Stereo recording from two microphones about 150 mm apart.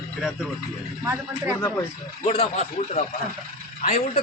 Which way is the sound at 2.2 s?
45° left (ahead or behind).